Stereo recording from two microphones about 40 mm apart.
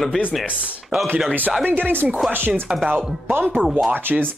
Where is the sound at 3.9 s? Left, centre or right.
Right.